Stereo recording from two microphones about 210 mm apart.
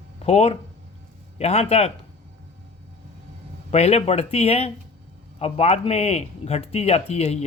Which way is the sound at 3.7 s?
30° left (ahead or behind).